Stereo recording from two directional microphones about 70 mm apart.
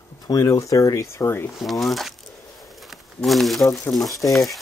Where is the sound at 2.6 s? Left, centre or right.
Centre.